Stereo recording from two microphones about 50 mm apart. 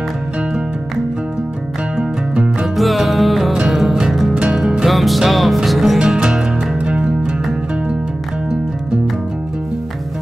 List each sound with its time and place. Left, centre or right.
2.6 s music: centre
4.8 s music: centre